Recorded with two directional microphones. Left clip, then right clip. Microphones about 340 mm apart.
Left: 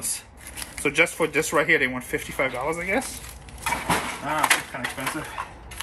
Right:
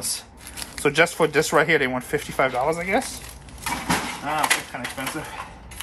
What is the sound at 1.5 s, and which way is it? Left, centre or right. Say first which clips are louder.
Speech: right 2 dB; right.